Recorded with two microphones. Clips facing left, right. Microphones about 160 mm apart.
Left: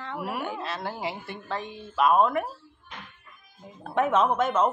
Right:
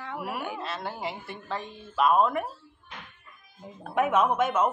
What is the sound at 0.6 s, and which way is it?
Speech, centre (ahead or behind).